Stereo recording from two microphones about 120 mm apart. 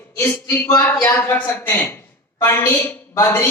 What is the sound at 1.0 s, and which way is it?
A woman's voice, 20° left (ahead or behind).